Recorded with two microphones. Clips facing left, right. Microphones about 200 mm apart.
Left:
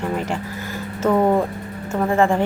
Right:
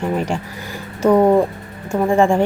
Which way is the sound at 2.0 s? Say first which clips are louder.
Right 3 dB; 15° right (ahead or behind).